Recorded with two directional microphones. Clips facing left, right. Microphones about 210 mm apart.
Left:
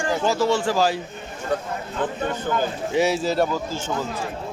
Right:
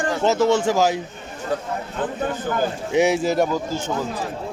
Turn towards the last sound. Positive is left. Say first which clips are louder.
# right 2 dB
turn(degrees=-15)  # may be behind; listen again after turning